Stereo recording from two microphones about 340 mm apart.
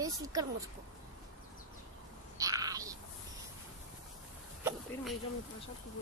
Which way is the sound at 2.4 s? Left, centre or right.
Centre.